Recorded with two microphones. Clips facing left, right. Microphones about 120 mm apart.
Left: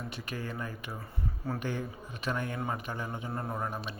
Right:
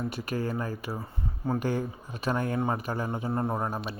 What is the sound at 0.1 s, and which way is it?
A man's voice, 40° right (ahead or behind).